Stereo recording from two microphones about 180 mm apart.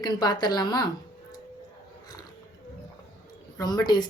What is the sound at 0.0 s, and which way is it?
Speech, 20° left (ahead or behind).